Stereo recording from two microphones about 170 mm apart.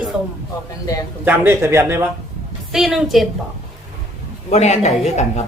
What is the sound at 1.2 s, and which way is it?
Speech, 10° right (ahead or behind).